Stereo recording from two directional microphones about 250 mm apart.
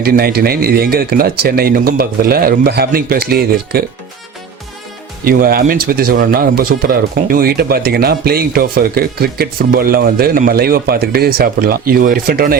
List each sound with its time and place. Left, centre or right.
0.0 s speech: right
5.2 s speech: right